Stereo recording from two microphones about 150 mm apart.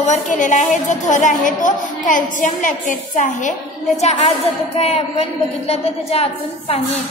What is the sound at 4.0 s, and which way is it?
A woman's voice, 45° left (ahead or behind).